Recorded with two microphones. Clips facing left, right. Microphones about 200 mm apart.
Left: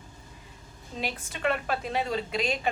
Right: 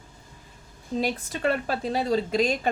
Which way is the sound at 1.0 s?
35° right (ahead or behind).